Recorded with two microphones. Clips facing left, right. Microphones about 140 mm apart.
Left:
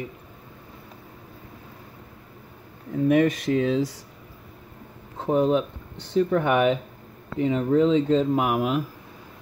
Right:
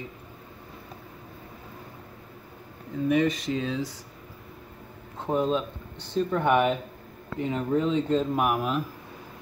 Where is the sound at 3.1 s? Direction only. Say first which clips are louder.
Left 4 dB; 65° left (ahead or behind); by 3.8 s 80° left.